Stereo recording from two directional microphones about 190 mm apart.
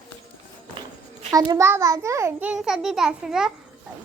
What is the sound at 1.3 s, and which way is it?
A child's voice, 20° right (ahead or behind).